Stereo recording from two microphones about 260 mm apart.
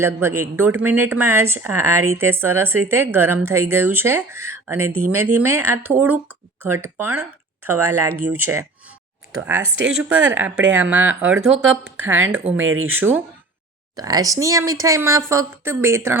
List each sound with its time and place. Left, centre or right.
0.0 s a woman's voice: centre
9.7 s speech: right
10.0 s a woman's voice: centre
12.5 s speech: right
12.9 s a woman's voice: centre